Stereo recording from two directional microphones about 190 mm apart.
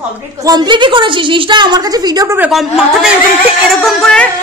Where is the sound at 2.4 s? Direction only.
Centre (ahead or behind).